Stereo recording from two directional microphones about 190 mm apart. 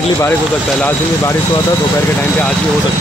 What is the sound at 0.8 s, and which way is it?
Speech, 10° left (ahead or behind).